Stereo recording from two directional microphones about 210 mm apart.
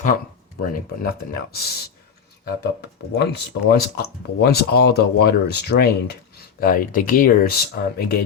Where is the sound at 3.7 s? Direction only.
50° left (ahead or behind).